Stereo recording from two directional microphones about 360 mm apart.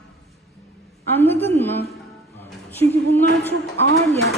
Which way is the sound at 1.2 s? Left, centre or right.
Centre.